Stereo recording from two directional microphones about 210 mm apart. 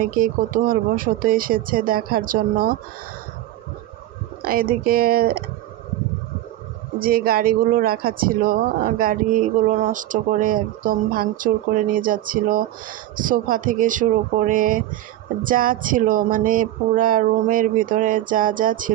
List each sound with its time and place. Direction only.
0.0 s speech: 40° right (ahead or behind)
4.4 s speech: 45° right (ahead or behind)
7.0 s speech: 45° right (ahead or behind)